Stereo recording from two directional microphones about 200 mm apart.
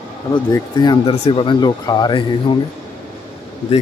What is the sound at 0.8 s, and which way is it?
Speech, 25° left (ahead or behind).